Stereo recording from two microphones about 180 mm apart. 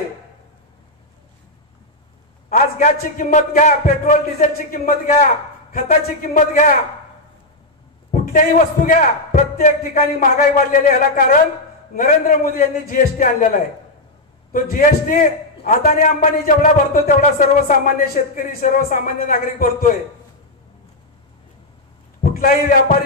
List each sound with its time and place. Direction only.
2.5 s a man's voice: 50° left (ahead or behind)
8.1 s a man's voice: 45° left (ahead or behind)
22.3 s a sound: 50° left (ahead or behind)